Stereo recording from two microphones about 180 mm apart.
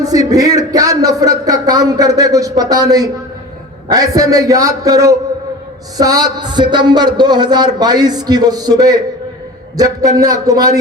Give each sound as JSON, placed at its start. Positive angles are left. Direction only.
{"t": 0.0, "sound": "speech", "side_deg": -20}